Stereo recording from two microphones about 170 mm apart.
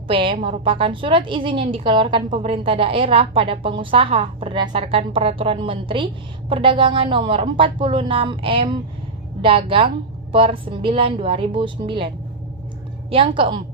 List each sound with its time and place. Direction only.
0.1 s a woman's voice: 30° right (ahead or behind)